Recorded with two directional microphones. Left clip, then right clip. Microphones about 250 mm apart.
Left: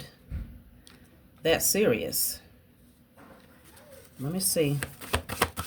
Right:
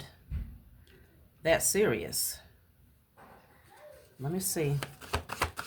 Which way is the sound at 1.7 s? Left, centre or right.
Centre.